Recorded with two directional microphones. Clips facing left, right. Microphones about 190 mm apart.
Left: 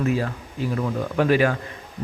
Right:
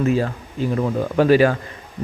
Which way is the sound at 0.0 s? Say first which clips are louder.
Right 4 dB; 30° right (ahead or behind).